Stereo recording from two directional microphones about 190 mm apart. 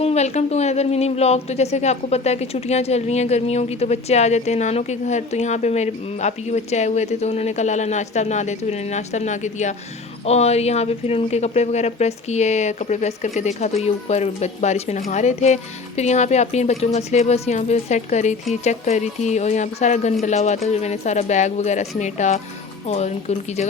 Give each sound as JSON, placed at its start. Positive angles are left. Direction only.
{"t": 0.0, "sound": "speech", "side_deg": 35}